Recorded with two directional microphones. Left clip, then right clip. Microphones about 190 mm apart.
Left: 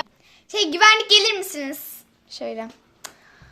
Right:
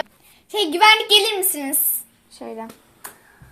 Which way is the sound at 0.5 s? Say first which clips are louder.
Right 1 dB; 20° left (ahead or behind).